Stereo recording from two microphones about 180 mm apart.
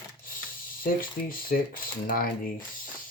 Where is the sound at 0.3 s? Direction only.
50° left (ahead or behind).